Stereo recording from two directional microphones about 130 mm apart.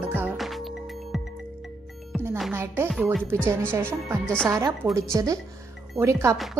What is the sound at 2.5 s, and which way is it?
A woman's voice, 20° right (ahead or behind).